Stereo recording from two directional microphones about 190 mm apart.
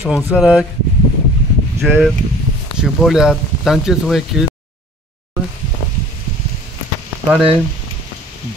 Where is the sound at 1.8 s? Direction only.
5° right (ahead or behind).